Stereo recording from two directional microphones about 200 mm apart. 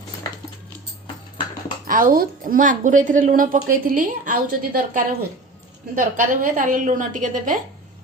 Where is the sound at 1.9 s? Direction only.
45° right (ahead or behind).